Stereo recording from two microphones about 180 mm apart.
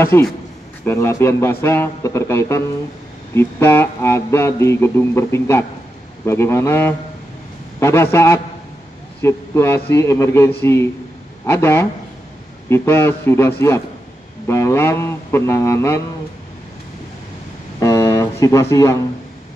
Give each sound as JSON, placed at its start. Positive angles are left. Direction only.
{"t": 0.1, "sound": "speech", "side_deg": 15}
{"t": 17.7, "sound": "music", "side_deg": 20}